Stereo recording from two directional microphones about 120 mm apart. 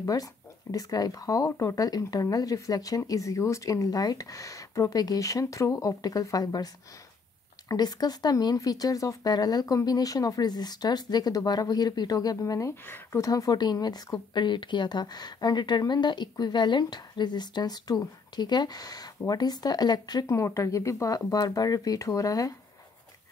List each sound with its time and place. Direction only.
0.0 s speech: 30° left (ahead or behind)